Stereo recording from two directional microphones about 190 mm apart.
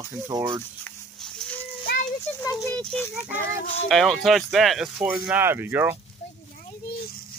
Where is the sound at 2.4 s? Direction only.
15° left (ahead or behind).